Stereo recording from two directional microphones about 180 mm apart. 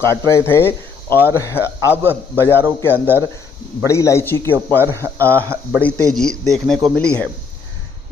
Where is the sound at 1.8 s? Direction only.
10° right (ahead or behind).